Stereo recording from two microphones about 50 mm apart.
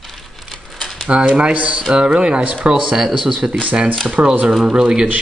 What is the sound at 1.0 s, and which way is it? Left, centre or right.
Speech, right.